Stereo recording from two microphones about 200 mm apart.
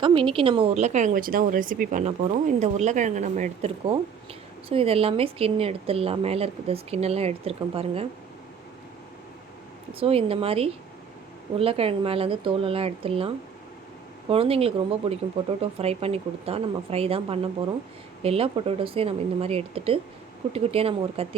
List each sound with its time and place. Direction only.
0.0 s speech: 25° right (ahead or behind)
9.9 s speech: 30° right (ahead or behind)